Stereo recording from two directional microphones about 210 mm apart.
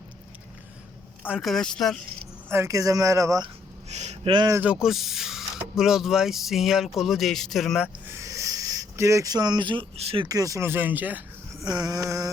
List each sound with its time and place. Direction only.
1.3 s speech: centre (ahead or behind)
2.5 s speech: 15° right (ahead or behind)
3.8 s speech: 30° right (ahead or behind); by 7.9 s centre (ahead or behind)
8.1 s speech: 15° right (ahead or behind)